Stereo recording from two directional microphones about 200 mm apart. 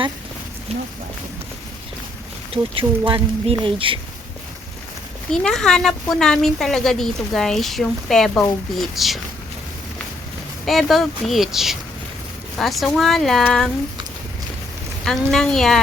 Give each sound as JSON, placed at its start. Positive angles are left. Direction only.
{"t": 2.5, "sound": "speech", "side_deg": -25}
{"t": 5.3, "sound": "speech", "side_deg": 5}
{"t": 10.7, "sound": "speech", "side_deg": 0}
{"t": 15.0, "sound": "speech", "side_deg": 0}